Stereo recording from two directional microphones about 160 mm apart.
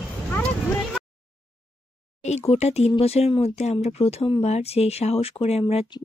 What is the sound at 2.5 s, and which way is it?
Speech, 40° left (ahead or behind).